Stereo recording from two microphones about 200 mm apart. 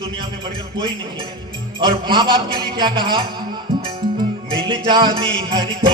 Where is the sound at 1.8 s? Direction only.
25° right (ahead or behind).